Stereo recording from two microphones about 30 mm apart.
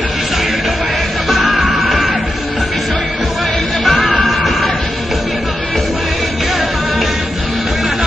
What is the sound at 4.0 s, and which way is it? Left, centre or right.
Music, left.